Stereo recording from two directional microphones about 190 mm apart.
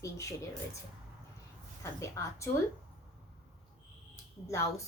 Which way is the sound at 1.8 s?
15° left (ahead or behind).